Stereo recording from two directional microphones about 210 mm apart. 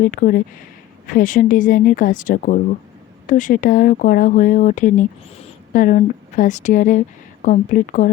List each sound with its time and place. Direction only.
0.0 s speech: 40° left (ahead or behind)